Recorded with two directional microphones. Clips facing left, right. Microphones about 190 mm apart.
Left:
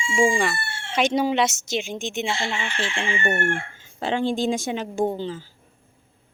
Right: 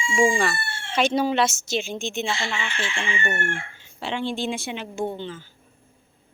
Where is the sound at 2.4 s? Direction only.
30° left (ahead or behind).